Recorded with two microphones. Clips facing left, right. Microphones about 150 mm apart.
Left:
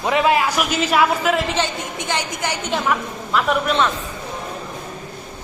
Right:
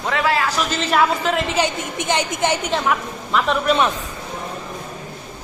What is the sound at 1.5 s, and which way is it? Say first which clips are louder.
A woman's voice: right 2 dB; 15° right (ahead or behind).